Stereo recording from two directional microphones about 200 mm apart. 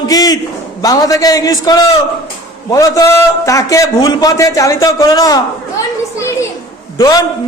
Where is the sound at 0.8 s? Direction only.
20° left (ahead or behind).